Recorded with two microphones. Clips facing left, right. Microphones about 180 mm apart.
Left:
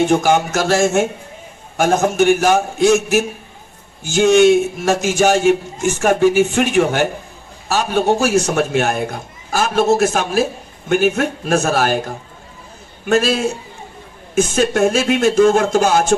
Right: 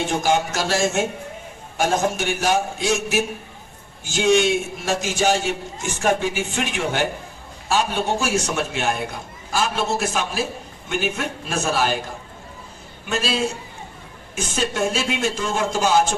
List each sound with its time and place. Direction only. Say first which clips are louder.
0.1 s a man's voice: left 6 dB; 55° left (ahead or behind)